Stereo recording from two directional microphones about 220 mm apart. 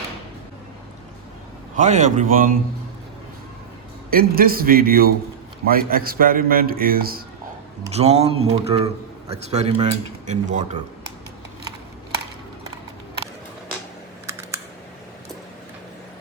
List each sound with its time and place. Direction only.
1.7 s a man's voice: 35° right (ahead or behind)
4.1 s a man's voice: 40° right (ahead or behind)
7.9 s a man's voice: 30° right (ahead or behind)
14.3 s typing: 10° right (ahead or behind)